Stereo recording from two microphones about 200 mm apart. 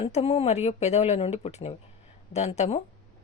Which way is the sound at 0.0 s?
30° left (ahead or behind).